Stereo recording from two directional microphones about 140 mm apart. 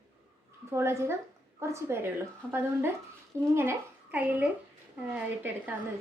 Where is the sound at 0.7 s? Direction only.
20° right (ahead or behind).